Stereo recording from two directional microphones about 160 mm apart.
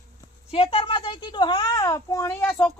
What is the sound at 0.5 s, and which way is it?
A child's voice, 35° left (ahead or behind).